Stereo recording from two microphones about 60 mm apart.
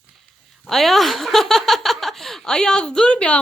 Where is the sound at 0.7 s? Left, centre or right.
Centre.